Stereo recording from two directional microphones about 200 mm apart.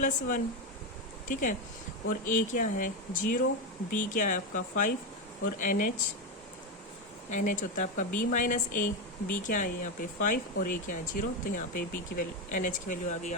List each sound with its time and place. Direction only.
0.0 s speech: 40° left (ahead or behind)
7.3 s speech: 40° left (ahead or behind)